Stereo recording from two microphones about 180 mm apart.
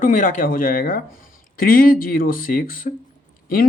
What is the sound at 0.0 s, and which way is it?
Speech, 45° left (ahead or behind).